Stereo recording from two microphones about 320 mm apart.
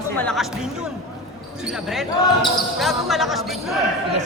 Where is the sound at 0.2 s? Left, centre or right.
Centre.